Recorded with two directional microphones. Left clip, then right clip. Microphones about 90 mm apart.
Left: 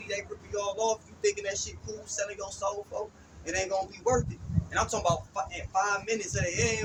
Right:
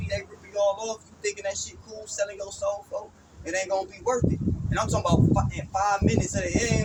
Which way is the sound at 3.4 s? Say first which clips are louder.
Right 3 dB; 5° left (ahead or behind).